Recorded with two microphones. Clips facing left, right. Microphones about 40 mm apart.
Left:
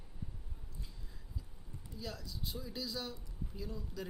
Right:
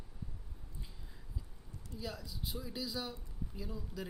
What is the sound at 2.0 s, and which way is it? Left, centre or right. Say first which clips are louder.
Speech: right 1 dB; centre.